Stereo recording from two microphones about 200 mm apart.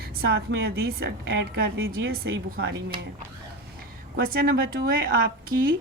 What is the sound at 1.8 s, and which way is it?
Speech, 90° right.